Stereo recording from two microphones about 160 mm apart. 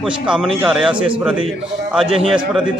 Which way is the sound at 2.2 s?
35° right (ahead or behind).